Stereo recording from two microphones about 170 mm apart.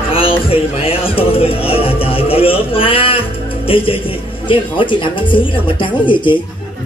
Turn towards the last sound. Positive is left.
turn(degrees=30)  # may be behind; listen again after turning